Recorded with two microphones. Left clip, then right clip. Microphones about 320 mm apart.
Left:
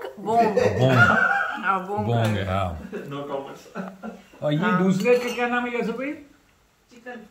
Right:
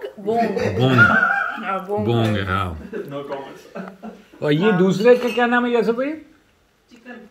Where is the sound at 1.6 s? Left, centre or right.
Centre.